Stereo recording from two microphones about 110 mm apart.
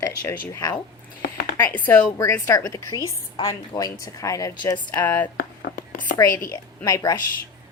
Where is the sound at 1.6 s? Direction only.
15° left (ahead or behind); by 4.8 s 30° left (ahead or behind).